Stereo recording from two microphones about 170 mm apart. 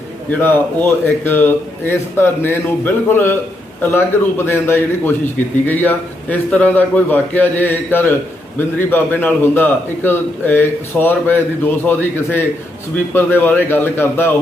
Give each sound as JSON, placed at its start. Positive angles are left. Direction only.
{"t": 0.3, "sound": "a man's voice", "side_deg": 10}